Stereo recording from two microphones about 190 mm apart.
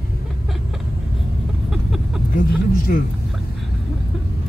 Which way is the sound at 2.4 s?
50° left (ahead or behind).